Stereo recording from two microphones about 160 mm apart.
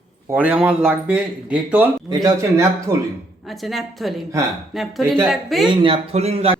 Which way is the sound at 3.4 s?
Centre (ahead or behind).